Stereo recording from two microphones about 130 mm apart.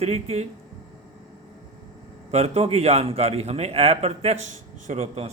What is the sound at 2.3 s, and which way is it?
A man's voice, 50° right (ahead or behind).